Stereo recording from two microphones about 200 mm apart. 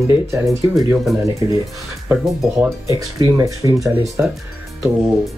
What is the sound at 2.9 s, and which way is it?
Speech, 15° right (ahead or behind).